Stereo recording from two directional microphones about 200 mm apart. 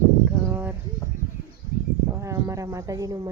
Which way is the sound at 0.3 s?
10° right (ahead or behind).